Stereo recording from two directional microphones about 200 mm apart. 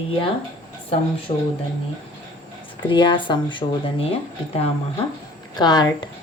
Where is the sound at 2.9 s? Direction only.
25° left (ahead or behind).